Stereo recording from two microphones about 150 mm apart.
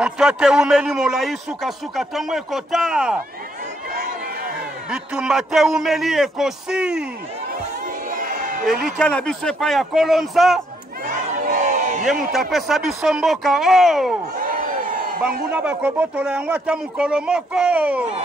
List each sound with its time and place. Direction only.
0.0 s speech: 5° right (ahead or behind)
4.9 s speech: 5° right (ahead or behind)
8.1 s a sound: 65° right (ahead or behind)
8.6 s speech: centre (ahead or behind)
11.1 s crowd: 60° right (ahead or behind)
12.1 s speech: centre (ahead or behind)
14.4 s crowd: 65° right (ahead or behind)
15.5 s speech: 10° right (ahead or behind)